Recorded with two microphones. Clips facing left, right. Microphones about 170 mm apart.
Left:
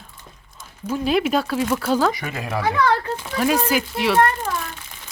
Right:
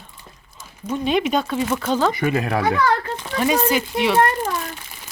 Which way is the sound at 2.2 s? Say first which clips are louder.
Right 7 dB; 60° right (ahead or behind).